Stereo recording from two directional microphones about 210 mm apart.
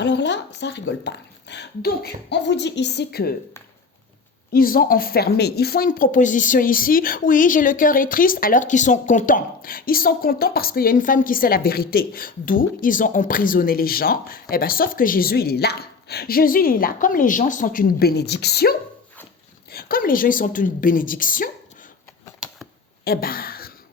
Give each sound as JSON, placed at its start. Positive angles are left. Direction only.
{"t": 0.0, "sound": "a woman's voice", "side_deg": 55}
{"t": 4.5, "sound": "a woman's voice", "side_deg": 45}
{"t": 23.0, "sound": "a sound", "side_deg": 45}